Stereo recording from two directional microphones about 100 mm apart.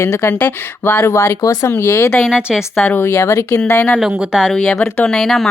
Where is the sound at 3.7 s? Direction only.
15° left (ahead or behind).